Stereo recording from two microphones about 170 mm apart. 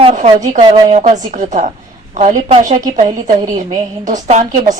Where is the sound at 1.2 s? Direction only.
45° right (ahead or behind).